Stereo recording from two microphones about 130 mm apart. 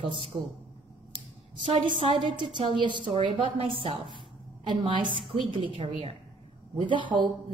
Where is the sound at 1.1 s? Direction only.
40° right (ahead or behind).